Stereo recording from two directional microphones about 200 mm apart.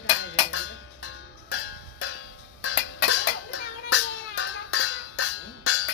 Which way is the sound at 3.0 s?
75° left (ahead or behind).